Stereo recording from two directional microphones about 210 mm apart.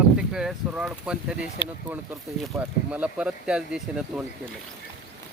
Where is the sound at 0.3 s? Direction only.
5° right (ahead or behind).